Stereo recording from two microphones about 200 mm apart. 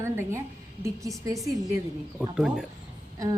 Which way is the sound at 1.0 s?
15° right (ahead or behind).